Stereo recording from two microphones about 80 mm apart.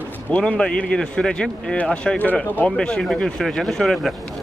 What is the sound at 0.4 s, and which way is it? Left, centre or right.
Speech, centre.